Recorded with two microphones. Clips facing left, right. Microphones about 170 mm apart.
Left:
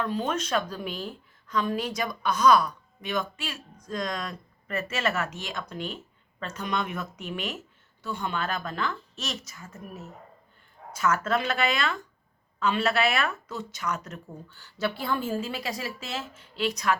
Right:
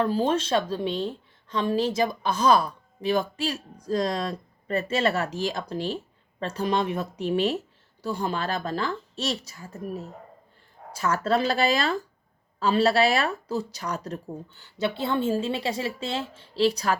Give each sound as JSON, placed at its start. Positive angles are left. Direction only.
{"t": 0.0, "sound": "a woman's voice", "side_deg": -30}
{"t": 14.5, "sound": "speech", "side_deg": -20}